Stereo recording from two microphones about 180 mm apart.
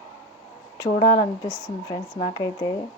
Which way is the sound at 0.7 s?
20° left (ahead or behind).